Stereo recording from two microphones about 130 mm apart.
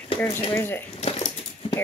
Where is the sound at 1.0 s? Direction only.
50° left (ahead or behind).